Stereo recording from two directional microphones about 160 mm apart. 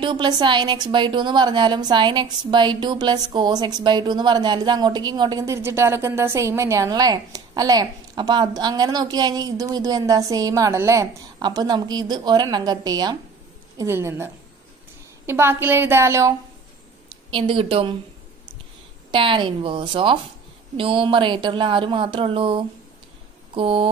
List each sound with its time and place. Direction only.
0.0 s a woman's voice: 30° right (ahead or behind)
17.3 s speech: 30° right (ahead or behind)
19.1 s speech: 30° right (ahead or behind)